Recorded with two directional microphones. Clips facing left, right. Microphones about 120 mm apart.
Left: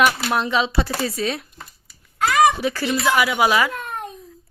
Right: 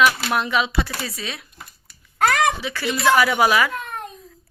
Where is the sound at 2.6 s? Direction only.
40° left (ahead or behind).